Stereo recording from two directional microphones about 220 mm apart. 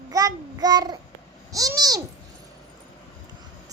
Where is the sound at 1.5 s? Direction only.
15° right (ahead or behind).